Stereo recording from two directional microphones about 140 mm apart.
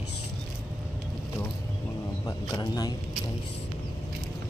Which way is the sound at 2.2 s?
30° left (ahead or behind).